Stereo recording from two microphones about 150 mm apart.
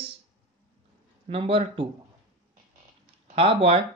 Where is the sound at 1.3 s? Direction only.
40° right (ahead or behind).